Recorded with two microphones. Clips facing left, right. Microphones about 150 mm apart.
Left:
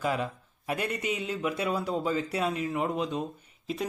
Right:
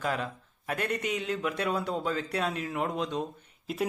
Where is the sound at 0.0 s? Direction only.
10° left (ahead or behind).